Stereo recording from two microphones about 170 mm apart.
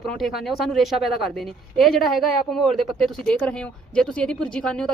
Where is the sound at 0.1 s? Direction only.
Centre (ahead or behind).